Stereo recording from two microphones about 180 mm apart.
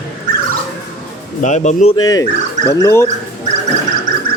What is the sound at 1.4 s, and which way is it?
Speech, 40° left (ahead or behind).